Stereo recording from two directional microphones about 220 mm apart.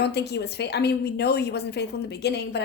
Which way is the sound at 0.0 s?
50° left (ahead or behind).